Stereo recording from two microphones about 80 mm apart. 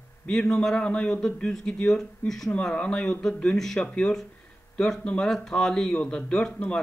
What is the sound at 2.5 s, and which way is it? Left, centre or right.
Speech, centre.